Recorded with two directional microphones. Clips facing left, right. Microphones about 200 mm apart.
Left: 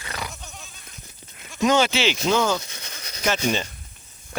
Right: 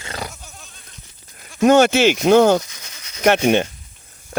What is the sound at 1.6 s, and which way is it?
Speech, 55° right (ahead or behind).